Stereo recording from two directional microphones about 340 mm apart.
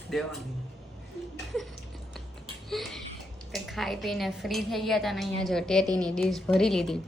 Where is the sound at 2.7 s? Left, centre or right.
Centre.